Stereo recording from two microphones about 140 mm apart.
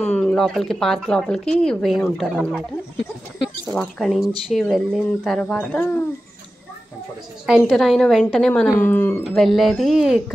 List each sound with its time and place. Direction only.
0.0 s speech: 5° left (ahead or behind)
3.7 s speech: centre (ahead or behind)
7.4 s speech: 5° right (ahead or behind); by 9.2 s 15° left (ahead or behind)
9.2 s speech: centre (ahead or behind)